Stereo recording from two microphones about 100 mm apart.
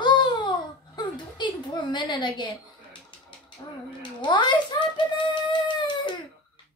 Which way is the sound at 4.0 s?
50° left (ahead or behind).